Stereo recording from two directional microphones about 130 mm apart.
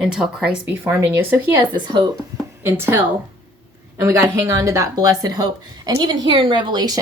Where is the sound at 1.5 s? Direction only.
35° right (ahead or behind).